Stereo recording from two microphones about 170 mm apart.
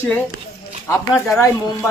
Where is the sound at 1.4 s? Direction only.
15° left (ahead or behind).